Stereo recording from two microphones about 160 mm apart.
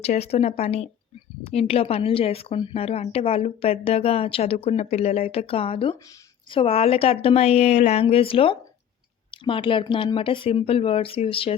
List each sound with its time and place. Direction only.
0.0 s speech: 40° left (ahead or behind)